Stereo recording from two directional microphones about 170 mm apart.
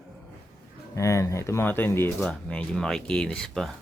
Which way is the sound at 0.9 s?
15° left (ahead or behind).